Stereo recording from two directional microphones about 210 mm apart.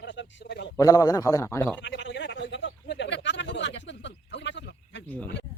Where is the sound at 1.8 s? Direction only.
60° left (ahead or behind).